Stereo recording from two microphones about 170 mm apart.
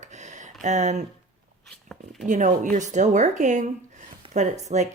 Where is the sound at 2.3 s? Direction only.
45° right (ahead or behind).